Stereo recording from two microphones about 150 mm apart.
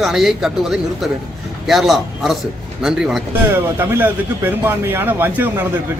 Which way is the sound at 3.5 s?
15° right (ahead or behind).